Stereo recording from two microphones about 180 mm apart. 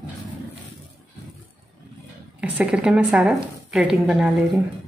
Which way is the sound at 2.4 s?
5° right (ahead or behind).